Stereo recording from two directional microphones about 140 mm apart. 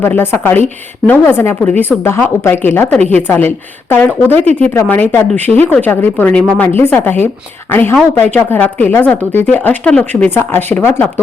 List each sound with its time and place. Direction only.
0.0 s a woman's voice: 15° left (ahead or behind)